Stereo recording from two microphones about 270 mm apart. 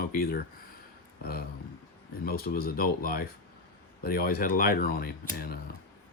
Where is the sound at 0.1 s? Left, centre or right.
Left.